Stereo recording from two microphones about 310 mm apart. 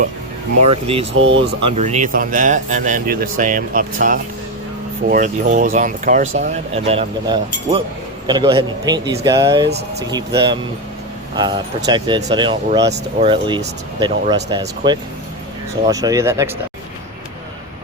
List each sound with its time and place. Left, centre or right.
0.6 s speech: centre
1.2 s speech: right
1.7 s speech: right
9.6 s speech: right
10.1 s speech: centre